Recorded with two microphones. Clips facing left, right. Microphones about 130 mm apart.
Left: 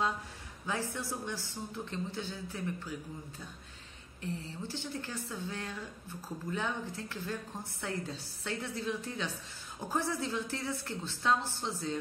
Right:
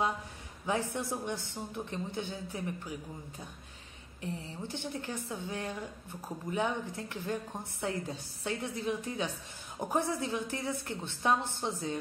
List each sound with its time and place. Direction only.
0.7 s a woman's voice: 20° right (ahead or behind)
4.2 s a woman's voice: 20° right (ahead or behind)